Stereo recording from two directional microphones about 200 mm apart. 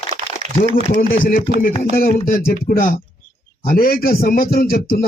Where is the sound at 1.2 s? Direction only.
45° left (ahead or behind).